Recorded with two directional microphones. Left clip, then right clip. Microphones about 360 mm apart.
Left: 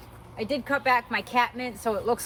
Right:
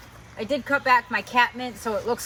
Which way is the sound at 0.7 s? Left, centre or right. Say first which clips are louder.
Right 4 dB; centre.